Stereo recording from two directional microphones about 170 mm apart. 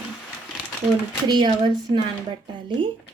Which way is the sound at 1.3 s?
25° right (ahead or behind).